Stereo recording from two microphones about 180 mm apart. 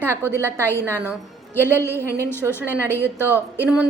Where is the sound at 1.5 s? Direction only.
10° left (ahead or behind).